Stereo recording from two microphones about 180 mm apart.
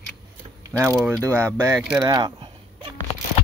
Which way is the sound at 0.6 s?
15° right (ahead or behind).